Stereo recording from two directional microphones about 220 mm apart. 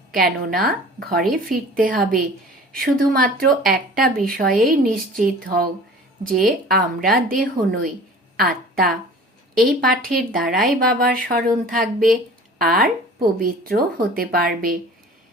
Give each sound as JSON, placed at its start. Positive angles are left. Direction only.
{"t": 0.3, "sound": "speech", "side_deg": -45}
{"t": 6.7, "sound": "a woman's voice", "side_deg": -40}